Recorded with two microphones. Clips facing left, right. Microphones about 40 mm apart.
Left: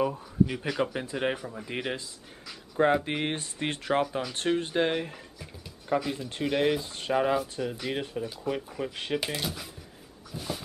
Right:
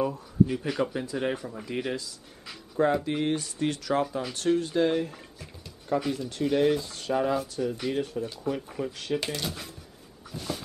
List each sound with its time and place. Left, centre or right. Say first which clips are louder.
0.0 s speech: right 1 dB; left
8.8 s speech: right 1 dB; left
9.2 s speech: even; centre
10.3 s dog: right 1 dB; centre